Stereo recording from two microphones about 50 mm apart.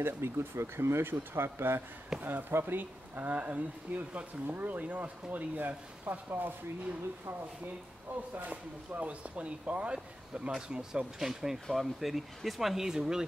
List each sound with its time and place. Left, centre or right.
0.0 s speech: right
7.6 s speech: right
8.5 s speech: right; by 13.2 s centre